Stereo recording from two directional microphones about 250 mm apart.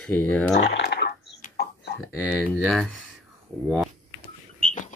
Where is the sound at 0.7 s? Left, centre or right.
Left.